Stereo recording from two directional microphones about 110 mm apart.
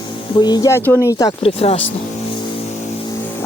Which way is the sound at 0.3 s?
40° left (ahead or behind).